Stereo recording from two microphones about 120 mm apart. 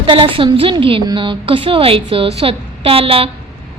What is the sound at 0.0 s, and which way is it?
A woman's voice, 45° right (ahead or behind).